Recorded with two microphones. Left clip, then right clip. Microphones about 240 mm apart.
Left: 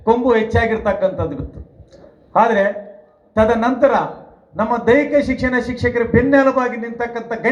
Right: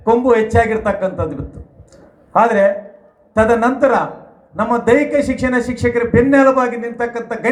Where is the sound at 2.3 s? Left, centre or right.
Right.